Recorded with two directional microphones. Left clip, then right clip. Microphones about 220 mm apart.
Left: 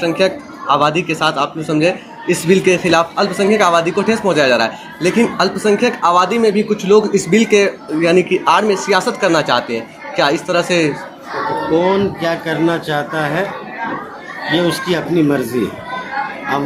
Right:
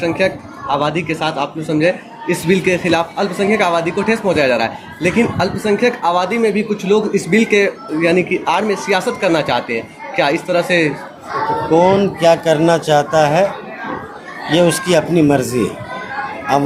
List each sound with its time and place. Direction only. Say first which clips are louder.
0.7 s speech: left 3 dB; 5° right (ahead or behind)
11.7 s speech: right 3 dB; 45° right (ahead or behind)
14.5 s speech: right 4 dB; 50° right (ahead or behind)